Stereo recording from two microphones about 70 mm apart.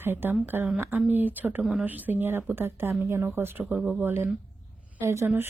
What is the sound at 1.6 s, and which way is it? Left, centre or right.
Speech, centre.